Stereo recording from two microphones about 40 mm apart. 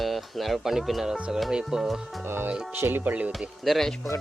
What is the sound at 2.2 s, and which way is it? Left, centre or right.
Speech, right.